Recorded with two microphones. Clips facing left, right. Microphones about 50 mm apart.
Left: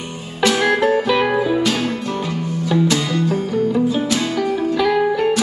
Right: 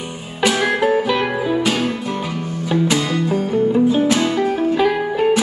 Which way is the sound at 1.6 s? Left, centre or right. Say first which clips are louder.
Even; centre.